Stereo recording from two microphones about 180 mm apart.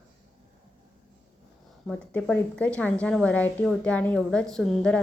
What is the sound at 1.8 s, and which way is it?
A woman's voice, 5° left (ahead or behind).